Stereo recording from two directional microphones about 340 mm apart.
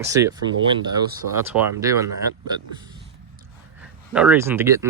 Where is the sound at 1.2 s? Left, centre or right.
Right.